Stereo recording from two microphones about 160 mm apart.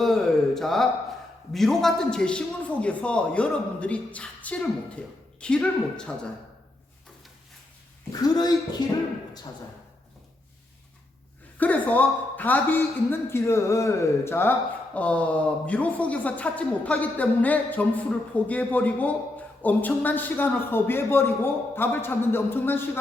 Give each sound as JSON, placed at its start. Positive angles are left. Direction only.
{"t": 0.0, "sound": "a woman's voice", "side_deg": 0}
{"t": 8.1, "sound": "speech", "side_deg": 25}
{"t": 11.5, "sound": "a woman's voice", "side_deg": 10}